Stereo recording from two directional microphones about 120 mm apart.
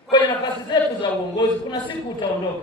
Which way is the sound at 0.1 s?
40° left (ahead or behind).